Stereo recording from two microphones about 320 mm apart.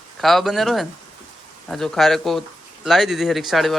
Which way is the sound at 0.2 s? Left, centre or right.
Centre.